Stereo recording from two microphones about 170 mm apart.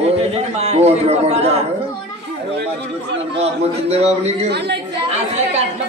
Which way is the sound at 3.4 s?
40° right (ahead or behind).